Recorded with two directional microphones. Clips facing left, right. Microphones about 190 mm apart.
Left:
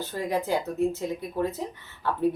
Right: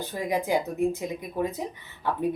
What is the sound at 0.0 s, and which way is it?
Speech, 15° right (ahead or behind).